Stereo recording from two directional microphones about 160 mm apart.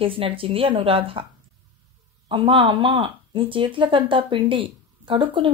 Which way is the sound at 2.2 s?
30° right (ahead or behind).